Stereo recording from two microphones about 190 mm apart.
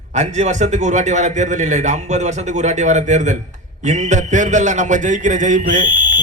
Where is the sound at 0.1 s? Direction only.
40° right (ahead or behind).